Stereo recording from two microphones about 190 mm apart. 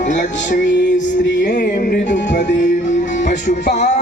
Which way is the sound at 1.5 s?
50° left (ahead or behind).